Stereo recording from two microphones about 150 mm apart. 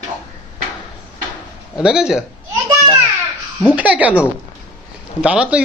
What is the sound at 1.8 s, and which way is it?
Speech, 5° right (ahead or behind).